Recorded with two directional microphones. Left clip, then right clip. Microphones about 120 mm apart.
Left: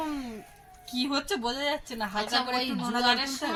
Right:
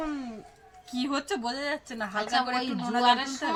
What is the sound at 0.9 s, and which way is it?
A woman's voice, 20° right (ahead or behind).